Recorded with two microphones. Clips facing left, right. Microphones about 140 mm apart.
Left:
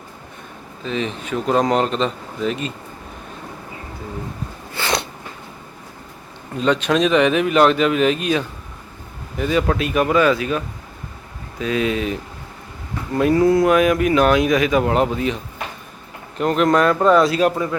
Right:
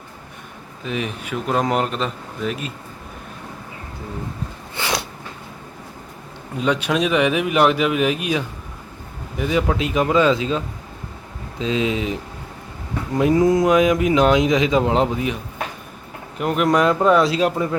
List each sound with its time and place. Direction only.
0.9 s speech: 10° right (ahead or behind)
4.8 s a sound: 20° right (ahead or behind)
6.6 s speech: 10° right (ahead or behind)
11.6 s speech: 20° right (ahead or behind)
16.4 s speech: 10° right (ahead or behind)
17.4 s speech: 25° right (ahead or behind)